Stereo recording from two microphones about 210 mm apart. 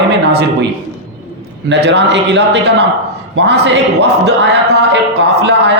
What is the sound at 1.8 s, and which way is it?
A man's voice, 55° right (ahead or behind).